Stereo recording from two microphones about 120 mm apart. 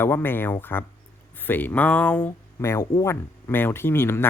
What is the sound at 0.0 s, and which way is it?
Speech, 20° left (ahead or behind).